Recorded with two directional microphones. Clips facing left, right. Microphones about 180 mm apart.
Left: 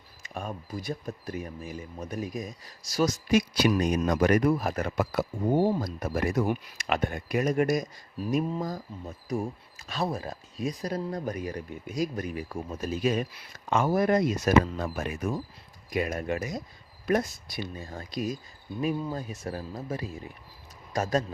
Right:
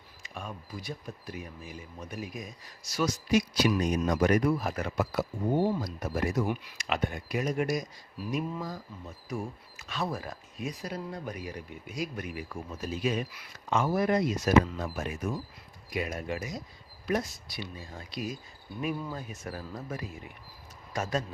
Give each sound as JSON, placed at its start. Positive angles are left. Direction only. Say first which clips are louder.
{"t": 0.2, "sound": "a man's voice", "louder": "left 5 dB", "side_deg": 45}
{"t": 3.3, "sound": "a man's voice", "louder": "left 2 dB", "side_deg": 60}